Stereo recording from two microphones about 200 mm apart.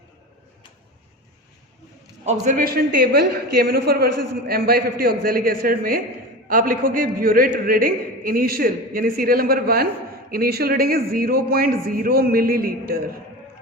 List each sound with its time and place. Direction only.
2.2 s a man's voice: 35° right (ahead or behind)